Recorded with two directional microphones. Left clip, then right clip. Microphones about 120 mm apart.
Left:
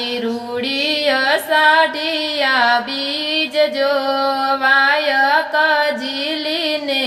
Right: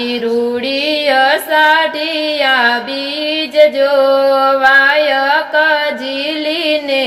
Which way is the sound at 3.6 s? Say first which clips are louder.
Right 9 dB; 15° right (ahead or behind).